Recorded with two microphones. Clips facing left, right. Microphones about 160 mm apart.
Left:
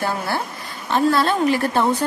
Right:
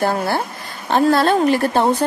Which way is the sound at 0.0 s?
40° right (ahead or behind).